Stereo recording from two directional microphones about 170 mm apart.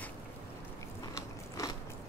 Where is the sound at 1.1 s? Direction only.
20° left (ahead or behind).